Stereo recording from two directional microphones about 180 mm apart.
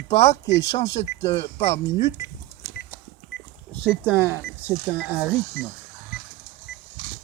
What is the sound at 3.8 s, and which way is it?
Speech, 5° right (ahead or behind).